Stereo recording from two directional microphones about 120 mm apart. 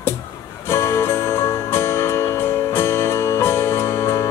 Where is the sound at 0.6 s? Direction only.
20° left (ahead or behind).